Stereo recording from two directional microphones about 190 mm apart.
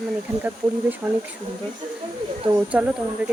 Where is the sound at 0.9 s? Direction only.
10° right (ahead or behind).